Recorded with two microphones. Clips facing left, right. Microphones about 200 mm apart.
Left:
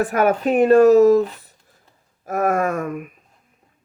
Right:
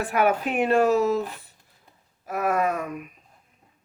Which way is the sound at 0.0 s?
45° left (ahead or behind).